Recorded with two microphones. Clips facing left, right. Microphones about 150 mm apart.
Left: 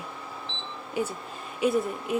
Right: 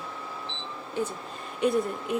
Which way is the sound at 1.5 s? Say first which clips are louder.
Even; centre (ahead or behind).